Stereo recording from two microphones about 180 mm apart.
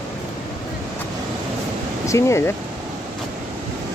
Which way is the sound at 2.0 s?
15° left (ahead or behind).